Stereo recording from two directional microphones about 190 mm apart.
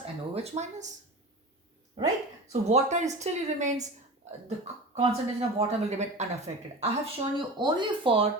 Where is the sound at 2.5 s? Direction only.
35° right (ahead or behind).